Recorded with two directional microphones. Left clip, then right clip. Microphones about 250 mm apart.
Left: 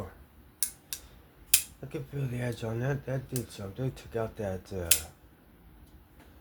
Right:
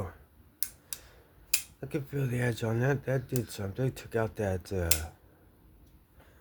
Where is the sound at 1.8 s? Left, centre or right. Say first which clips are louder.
Right 4 dB; right.